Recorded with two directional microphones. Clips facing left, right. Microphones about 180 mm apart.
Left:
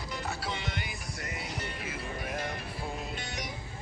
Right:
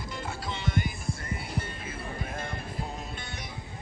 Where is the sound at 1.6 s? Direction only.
30° right (ahead or behind).